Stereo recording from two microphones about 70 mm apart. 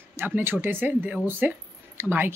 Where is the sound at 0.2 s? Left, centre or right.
Right.